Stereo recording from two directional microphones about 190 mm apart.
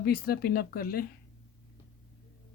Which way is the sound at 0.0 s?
55° left (ahead or behind).